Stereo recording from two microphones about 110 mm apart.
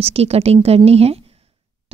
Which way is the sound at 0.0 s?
65° right (ahead or behind).